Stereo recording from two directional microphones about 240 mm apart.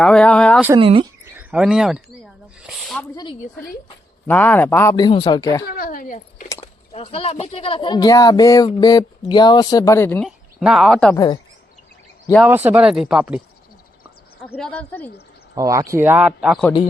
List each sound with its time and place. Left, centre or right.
0.0 s speech: centre
0.8 s speech: right
1.4 s a sound: centre
4.3 s speech: centre
5.6 s speech: left; by 11.2 s centre
12.3 s speech: centre
14.4 s speech: centre
15.5 s speech: centre